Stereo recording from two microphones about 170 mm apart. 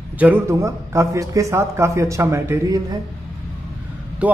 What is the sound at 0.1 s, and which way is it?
A man's voice, 10° right (ahead or behind).